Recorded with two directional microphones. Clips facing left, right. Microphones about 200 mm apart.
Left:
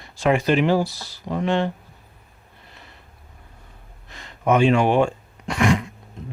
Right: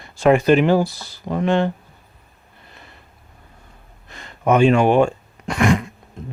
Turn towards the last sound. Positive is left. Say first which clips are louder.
# right 2 dB
turn(degrees=-50)  # may be behind; listen again after turning